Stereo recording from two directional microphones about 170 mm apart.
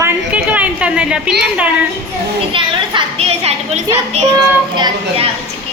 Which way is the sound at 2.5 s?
35° right (ahead or behind).